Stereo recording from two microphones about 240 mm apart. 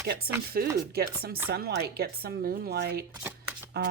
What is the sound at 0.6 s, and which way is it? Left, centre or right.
Speech, right.